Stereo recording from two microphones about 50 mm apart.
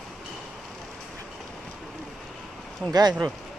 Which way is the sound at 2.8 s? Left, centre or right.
Left.